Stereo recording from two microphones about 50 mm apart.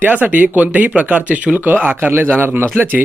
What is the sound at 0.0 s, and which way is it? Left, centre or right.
Speech, right.